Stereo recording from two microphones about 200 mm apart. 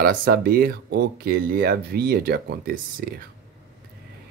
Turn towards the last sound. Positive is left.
turn(degrees=-50)  # may be behind; listen again after turning